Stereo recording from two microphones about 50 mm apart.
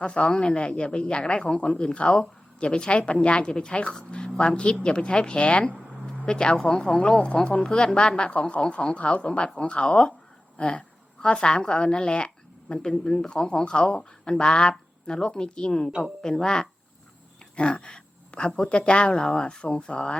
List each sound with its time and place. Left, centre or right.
0.0 s speech: left
6.1 s a sound: centre
6.6 s a woman's voice: centre